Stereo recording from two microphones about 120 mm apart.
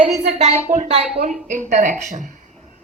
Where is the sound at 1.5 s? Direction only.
90° right.